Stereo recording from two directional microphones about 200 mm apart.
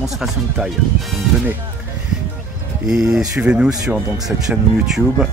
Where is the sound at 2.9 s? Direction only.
5° right (ahead or behind).